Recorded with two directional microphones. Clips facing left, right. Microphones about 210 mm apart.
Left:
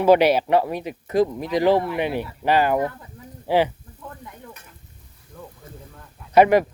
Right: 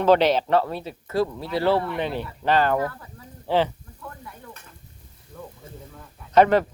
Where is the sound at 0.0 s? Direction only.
10° left (ahead or behind).